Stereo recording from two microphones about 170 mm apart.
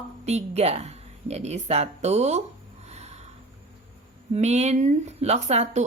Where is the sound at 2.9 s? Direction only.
40° right (ahead or behind).